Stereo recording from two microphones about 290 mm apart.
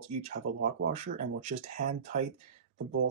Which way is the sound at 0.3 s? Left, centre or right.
Right.